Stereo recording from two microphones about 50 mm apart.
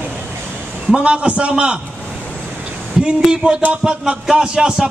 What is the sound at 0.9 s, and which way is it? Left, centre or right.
Speech, right.